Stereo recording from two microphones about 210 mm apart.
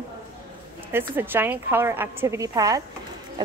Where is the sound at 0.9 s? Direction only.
10° right (ahead or behind).